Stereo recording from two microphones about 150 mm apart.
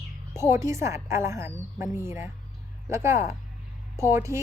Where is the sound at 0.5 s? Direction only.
20° right (ahead or behind).